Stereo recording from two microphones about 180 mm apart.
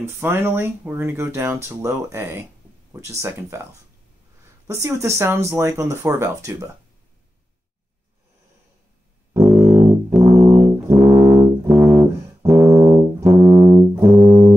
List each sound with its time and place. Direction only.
0.0 s speech: 15° right (ahead or behind)
4.6 s speech: 15° right (ahead or behind)
9.5 s music: 5° right (ahead or behind)
10.0 s brass instrument: 15° right (ahead or behind)
13.5 s brass instrument: 5° right (ahead or behind)